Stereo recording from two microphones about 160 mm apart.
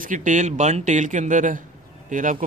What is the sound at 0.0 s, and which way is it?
A man's voice, 55° right (ahead or behind).